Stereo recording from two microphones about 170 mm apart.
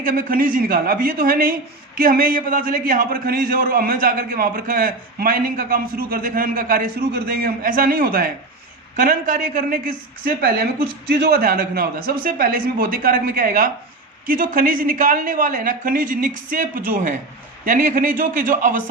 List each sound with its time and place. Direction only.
0.0 s a man's voice: 55° right (ahead or behind)